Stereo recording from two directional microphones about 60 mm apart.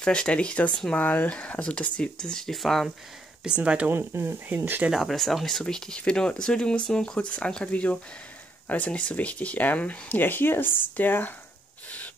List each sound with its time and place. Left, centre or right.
0.0 s speech: centre
3.4 s speech: centre
3.9 s speech: right
4.9 s speech: centre; by 11.3 s left